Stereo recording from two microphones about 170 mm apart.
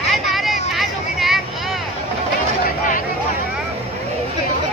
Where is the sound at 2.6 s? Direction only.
50° left (ahead or behind).